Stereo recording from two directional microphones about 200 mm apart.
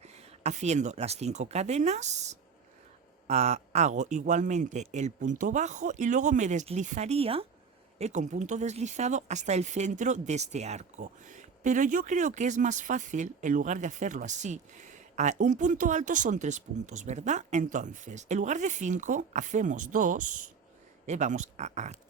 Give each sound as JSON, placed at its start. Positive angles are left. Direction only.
{"t": 0.0, "sound": "speech", "side_deg": -35}